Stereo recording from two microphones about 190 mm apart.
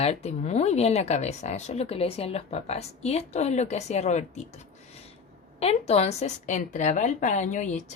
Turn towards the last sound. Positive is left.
turn(degrees=40)  # may be behind; listen again after turning